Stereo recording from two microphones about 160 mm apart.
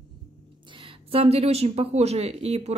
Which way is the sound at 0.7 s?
35° right (ahead or behind).